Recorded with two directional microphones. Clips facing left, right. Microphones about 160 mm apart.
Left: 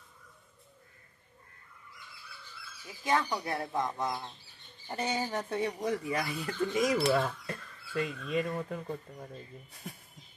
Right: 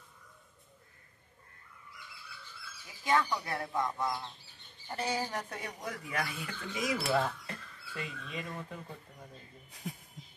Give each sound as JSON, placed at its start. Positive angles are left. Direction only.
{"t": 3.1, "sound": "speech", "side_deg": 20}